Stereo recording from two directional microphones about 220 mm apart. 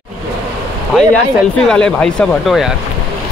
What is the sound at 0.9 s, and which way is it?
Speech, 5° left (ahead or behind).